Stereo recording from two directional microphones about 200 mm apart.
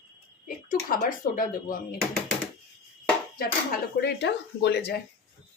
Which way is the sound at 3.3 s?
50° left (ahead or behind).